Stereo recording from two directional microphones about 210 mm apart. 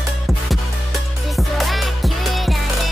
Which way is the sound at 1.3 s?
Centre (ahead or behind).